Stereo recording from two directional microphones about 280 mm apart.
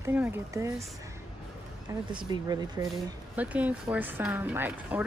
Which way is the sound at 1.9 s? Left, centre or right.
Centre.